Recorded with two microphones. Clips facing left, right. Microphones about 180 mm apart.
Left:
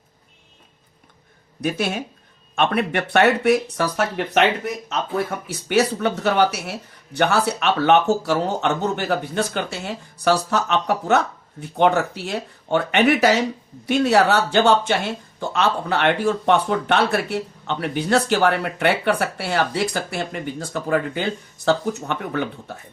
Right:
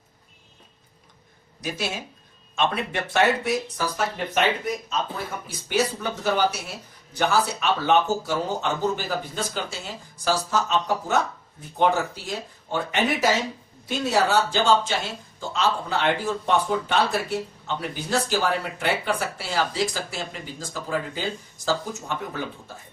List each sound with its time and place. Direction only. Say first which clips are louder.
1.6 s speech: left 7 dB; 60° left (ahead or behind)